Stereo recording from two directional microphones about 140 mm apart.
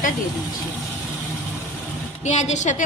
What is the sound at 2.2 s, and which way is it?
Speech, 60° left (ahead or behind).